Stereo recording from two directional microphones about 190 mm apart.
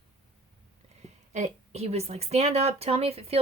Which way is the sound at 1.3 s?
35° right (ahead or behind).